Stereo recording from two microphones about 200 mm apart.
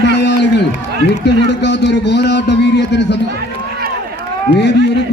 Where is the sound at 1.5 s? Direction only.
60° left (ahead or behind).